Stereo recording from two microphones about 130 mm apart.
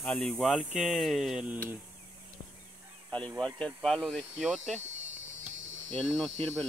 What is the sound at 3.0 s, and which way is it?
Speech, 10° left (ahead or behind).